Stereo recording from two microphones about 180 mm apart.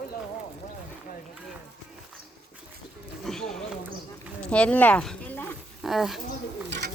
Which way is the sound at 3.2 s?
5° left (ahead or behind).